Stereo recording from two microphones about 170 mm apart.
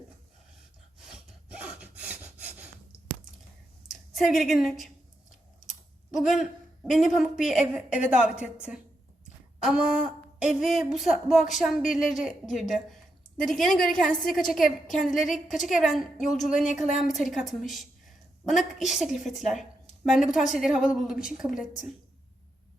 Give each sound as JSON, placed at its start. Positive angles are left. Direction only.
{"t": 1.0, "sound": "sawing", "side_deg": -5}
{"t": 3.8, "sound": "a woman's voice", "side_deg": 0}
{"t": 6.1, "sound": "speech", "side_deg": 0}